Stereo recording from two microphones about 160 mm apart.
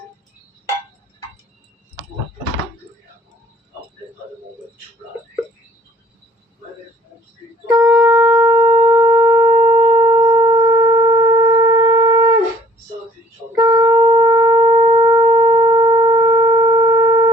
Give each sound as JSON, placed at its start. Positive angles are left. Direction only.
{"t": 7.8, "sound": "shofar", "side_deg": -20}
{"t": 13.6, "sound": "shofar", "side_deg": -25}
{"t": 16.9, "sound": "sine wave", "side_deg": -20}